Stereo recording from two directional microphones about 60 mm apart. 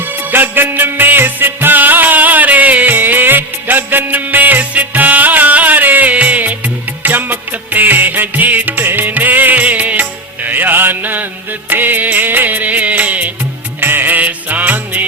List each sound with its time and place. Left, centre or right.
0.3 s music: right